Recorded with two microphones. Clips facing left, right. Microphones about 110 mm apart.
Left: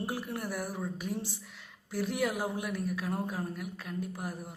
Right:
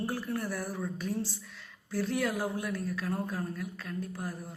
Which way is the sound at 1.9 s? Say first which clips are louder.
Right 1 dB; 15° left (ahead or behind).